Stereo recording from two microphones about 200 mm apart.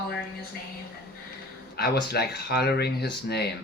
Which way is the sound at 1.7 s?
50° left (ahead or behind).